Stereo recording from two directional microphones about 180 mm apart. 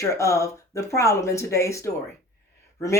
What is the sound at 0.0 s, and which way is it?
Speech, 15° left (ahead or behind).